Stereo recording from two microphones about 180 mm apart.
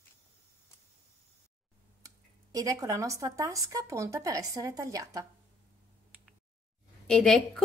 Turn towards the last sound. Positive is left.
turn(degrees=5)  # may be behind; listen again after turning